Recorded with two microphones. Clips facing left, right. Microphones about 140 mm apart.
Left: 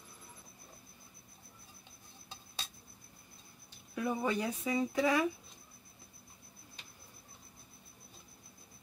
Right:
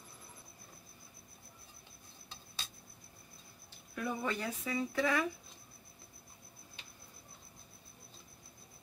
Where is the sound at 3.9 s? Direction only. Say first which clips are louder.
Left 4 dB; 15° left (ahead or behind).